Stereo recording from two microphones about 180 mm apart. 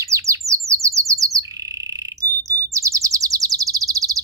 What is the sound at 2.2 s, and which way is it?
Chirp, 15° right (ahead or behind).